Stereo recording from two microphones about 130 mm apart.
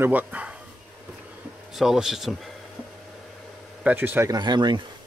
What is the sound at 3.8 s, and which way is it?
Speech, 15° right (ahead or behind).